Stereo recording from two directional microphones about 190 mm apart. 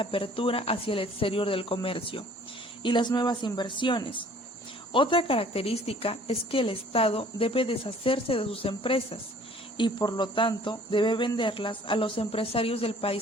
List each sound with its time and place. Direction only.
0.0 s speech: 30° left (ahead or behind)